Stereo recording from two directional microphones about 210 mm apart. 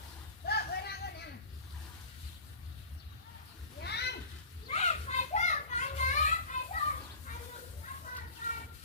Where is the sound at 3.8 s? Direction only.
50° left (ahead or behind).